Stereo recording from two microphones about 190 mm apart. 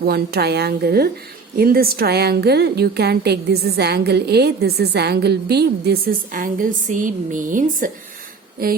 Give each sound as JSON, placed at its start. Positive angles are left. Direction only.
{"t": 0.0, "sound": "a woman's voice", "side_deg": -55}